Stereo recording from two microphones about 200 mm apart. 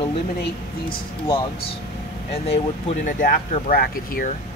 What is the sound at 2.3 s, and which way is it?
Speech, 30° left (ahead or behind).